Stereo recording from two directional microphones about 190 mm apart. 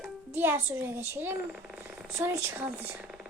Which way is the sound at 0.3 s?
10° right (ahead or behind).